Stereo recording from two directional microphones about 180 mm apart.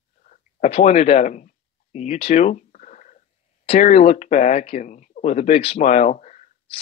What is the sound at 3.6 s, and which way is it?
Speech, 35° left (ahead or behind).